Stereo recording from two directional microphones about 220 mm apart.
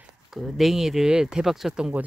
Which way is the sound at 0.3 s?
Centre (ahead or behind).